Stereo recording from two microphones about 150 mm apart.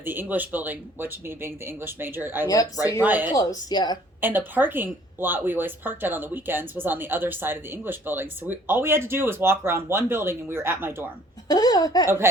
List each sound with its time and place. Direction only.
0.0 s speech: 15° right (ahead or behind)
2.5 s speech: 25° left (ahead or behind)
3.0 s speech: 10° right (ahead or behind)
3.3 s speech: 25° left (ahead or behind)
4.2 s speech: 15° right (ahead or behind)
11.4 s speech: 25° left (ahead or behind)